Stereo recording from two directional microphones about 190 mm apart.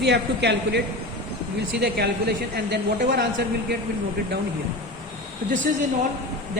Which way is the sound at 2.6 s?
65° right (ahead or behind).